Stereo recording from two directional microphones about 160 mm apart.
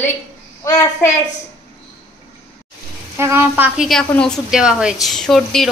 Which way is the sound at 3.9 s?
5° left (ahead or behind).